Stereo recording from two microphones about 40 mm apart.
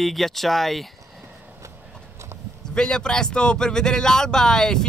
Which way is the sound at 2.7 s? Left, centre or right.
Centre.